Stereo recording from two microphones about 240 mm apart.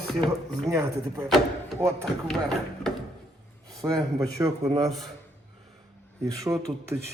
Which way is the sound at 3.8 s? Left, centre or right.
Centre.